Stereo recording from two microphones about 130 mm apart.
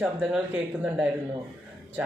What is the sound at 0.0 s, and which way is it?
Speech, 5° right (ahead or behind).